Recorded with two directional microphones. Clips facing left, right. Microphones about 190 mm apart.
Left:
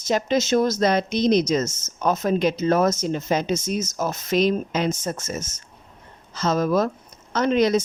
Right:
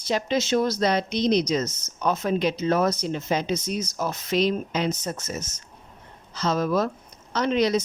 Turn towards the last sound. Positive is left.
turn(degrees=50)  # may be behind; listen again after turning